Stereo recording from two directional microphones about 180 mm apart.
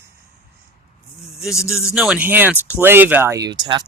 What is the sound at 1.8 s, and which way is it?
Speech, 5° right (ahead or behind).